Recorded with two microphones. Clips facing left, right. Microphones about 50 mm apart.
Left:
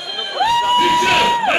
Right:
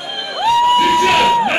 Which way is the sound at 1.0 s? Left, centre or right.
Centre.